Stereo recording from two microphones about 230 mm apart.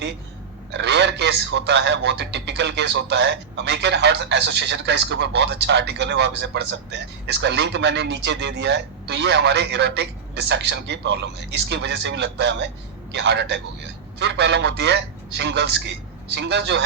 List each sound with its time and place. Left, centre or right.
0.7 s a man's voice: right